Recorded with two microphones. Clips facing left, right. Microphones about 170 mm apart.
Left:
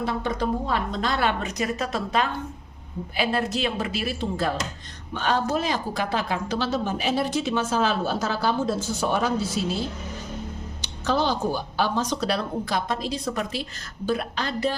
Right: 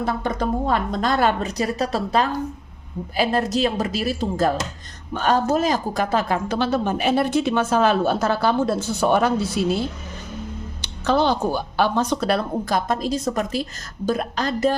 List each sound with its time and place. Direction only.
0.0 s a woman's voice: 50° right (ahead or behind)